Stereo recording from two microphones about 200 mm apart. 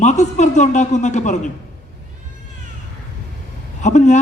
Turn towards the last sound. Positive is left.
turn(degrees=35)  # may be behind; listen again after turning